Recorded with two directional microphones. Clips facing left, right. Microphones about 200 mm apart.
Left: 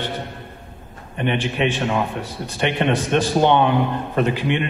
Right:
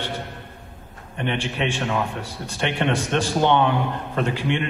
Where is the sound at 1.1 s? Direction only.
15° left (ahead or behind).